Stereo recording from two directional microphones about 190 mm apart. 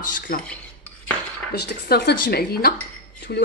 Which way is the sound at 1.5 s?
55° left (ahead or behind).